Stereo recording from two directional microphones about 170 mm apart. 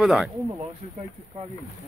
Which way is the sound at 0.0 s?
Centre (ahead or behind).